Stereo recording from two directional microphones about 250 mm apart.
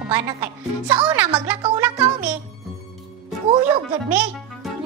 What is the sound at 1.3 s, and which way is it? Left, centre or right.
Music, centre.